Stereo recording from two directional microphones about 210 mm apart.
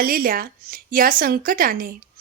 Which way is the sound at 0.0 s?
45° right (ahead or behind).